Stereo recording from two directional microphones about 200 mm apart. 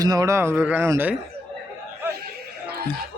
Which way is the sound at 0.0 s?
20° right (ahead or behind).